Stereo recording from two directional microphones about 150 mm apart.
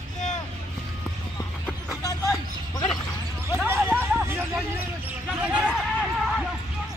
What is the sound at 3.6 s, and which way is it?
Speech, 15° right (ahead or behind).